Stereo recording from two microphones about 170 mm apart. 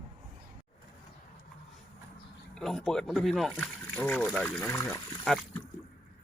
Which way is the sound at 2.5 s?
Centre (ahead or behind).